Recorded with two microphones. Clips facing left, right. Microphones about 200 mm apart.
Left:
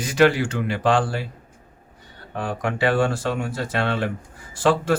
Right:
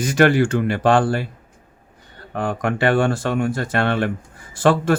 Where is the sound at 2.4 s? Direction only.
50° right (ahead or behind).